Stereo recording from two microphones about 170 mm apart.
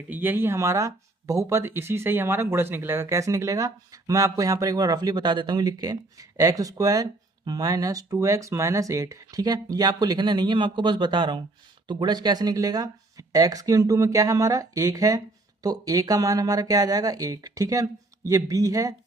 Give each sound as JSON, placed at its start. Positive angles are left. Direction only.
{"t": 0.1, "sound": "speech", "side_deg": -10}